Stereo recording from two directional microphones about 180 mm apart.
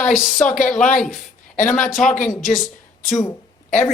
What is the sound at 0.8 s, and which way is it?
Speech, 45° left (ahead or behind).